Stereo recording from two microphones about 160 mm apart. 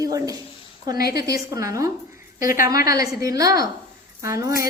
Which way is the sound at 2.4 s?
60° left (ahead or behind).